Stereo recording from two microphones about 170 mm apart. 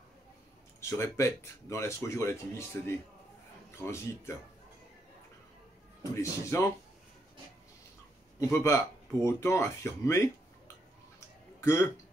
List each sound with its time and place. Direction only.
0.7 s speech: 15° left (ahead or behind)
6.1 s speech: 15° left (ahead or behind)
8.4 s speech: 15° left (ahead or behind)
11.1 s a sound: 15° left (ahead or behind)